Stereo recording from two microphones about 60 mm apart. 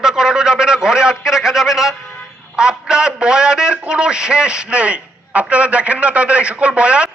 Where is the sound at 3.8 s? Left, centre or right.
Centre.